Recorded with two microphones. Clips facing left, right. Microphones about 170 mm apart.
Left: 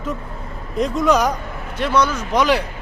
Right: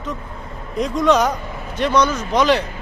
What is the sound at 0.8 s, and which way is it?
Speech, 5° left (ahead or behind).